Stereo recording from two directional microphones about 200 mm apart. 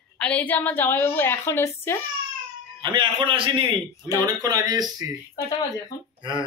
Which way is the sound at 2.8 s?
25° right (ahead or behind).